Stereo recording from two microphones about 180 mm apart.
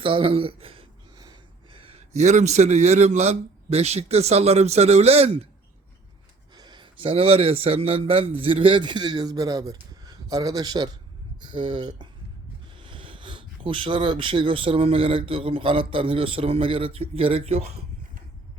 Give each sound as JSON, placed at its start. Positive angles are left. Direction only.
{"t": 0.0, "sound": "speech", "side_deg": -30}
{"t": 6.5, "sound": "a man's voice", "side_deg": -25}